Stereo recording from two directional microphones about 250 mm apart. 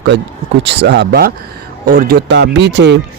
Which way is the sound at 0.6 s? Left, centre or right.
Right.